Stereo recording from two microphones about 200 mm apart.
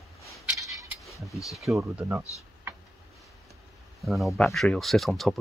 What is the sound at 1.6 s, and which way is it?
Speech, 5° right (ahead or behind).